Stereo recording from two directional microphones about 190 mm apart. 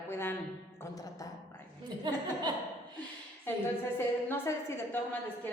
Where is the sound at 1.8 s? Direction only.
25° right (ahead or behind).